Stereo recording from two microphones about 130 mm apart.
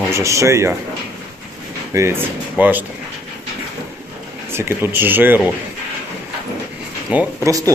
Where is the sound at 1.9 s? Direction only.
20° right (ahead or behind).